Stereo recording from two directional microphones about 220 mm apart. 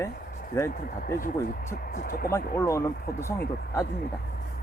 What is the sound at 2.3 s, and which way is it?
Speech, 15° left (ahead or behind).